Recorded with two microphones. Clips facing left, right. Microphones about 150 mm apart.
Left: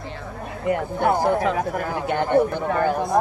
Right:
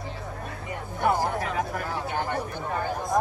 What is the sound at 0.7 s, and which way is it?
Speech, 70° left (ahead or behind).